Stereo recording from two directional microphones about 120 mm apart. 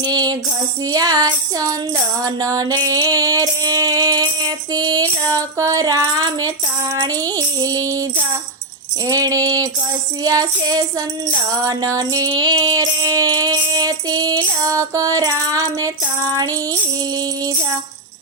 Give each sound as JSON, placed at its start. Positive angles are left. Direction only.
{"t": 0.0, "sound": "music", "side_deg": -35}
{"t": 9.0, "sound": "a sound", "side_deg": -30}
{"t": 10.2, "sound": "music", "side_deg": -35}